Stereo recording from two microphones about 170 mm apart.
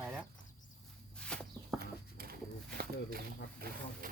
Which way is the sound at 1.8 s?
60° right (ahead or behind).